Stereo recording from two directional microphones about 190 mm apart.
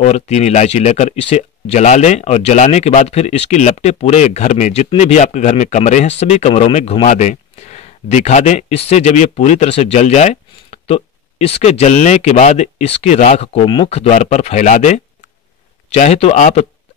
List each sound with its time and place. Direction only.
0.0 s speech: 35° left (ahead or behind)